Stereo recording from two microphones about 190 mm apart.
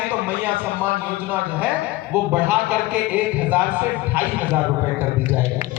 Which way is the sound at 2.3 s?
10° right (ahead or behind).